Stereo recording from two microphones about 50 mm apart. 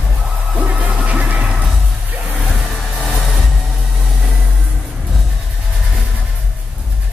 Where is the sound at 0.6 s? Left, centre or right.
Right.